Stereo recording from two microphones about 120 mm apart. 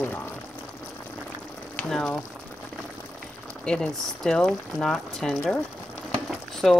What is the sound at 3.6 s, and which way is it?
Speech, 5° left (ahead or behind).